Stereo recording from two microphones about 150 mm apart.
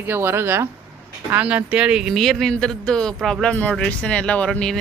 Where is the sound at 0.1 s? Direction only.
15° right (ahead or behind).